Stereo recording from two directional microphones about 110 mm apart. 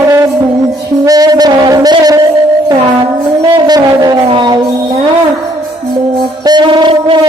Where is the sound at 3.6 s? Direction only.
40° right (ahead or behind).